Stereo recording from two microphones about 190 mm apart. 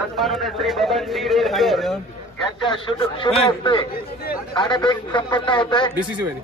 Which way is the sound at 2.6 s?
25° left (ahead or behind).